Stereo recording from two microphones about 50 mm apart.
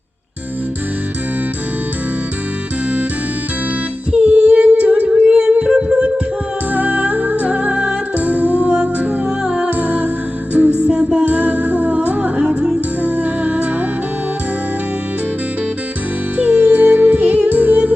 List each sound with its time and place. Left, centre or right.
4.1 s humming: right
5.0 s a sound: centre
6.7 s music: right
8.2 s music: right
9.4 s music: centre
9.7 s music: right
10.8 s music: right
11.3 s music: right
12.4 s music: centre
13.0 s music: right
16.4 s music: right
17.5 s music: right